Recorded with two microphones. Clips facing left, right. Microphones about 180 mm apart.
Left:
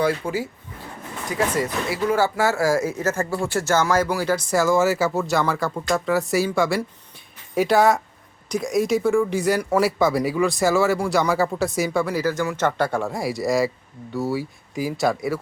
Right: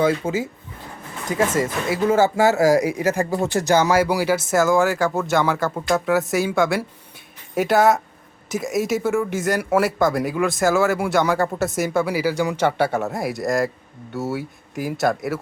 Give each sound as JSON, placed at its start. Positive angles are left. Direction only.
{"t": 0.0, "sound": "speech", "side_deg": -20}
{"t": 1.5, "sound": "speech", "side_deg": -20}